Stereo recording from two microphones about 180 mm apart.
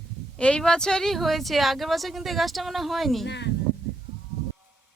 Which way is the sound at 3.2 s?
70° left (ahead or behind).